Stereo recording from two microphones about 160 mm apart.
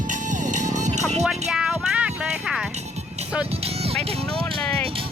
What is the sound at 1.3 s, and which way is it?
Music, 5° right (ahead or behind).